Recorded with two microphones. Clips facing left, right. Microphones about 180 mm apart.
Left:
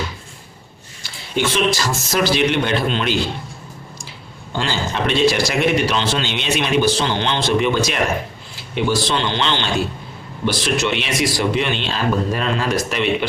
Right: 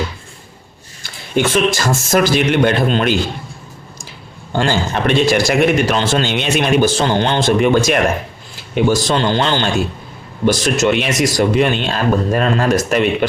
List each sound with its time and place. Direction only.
1.0 s a man's voice: 50° right (ahead or behind)
4.5 s a man's voice: 50° right (ahead or behind)